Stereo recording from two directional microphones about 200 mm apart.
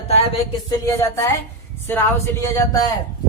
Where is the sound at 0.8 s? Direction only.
15° left (ahead or behind).